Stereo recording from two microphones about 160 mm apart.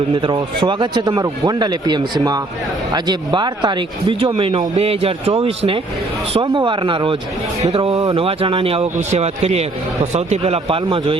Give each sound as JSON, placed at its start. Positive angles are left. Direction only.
{"t": 0.1, "sound": "speech", "side_deg": -30}
{"t": 7.9, "sound": "speech", "side_deg": -25}
{"t": 8.2, "sound": "speech", "side_deg": -35}